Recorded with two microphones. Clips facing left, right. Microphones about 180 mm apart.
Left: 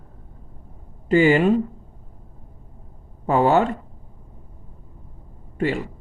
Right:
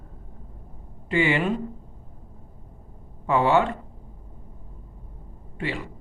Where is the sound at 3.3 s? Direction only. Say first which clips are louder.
Left 3 dB; 40° left (ahead or behind).